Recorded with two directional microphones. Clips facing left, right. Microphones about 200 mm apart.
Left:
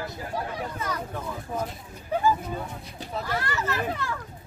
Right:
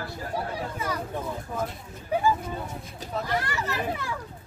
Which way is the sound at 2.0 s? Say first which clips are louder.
Even; 10° right (ahead or behind).